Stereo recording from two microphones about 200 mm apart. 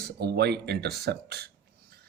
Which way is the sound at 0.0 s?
55° right (ahead or behind).